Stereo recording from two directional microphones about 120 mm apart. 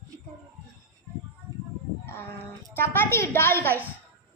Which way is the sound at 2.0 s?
15° left (ahead or behind).